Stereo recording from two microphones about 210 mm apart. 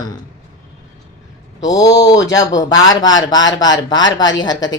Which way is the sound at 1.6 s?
15° left (ahead or behind).